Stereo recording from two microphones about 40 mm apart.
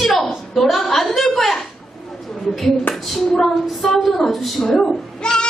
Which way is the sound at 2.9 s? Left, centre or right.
Centre.